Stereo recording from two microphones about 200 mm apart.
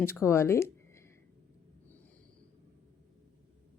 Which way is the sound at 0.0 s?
15° left (ahead or behind).